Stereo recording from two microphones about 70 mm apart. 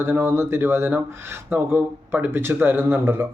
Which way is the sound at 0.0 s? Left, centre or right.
Right.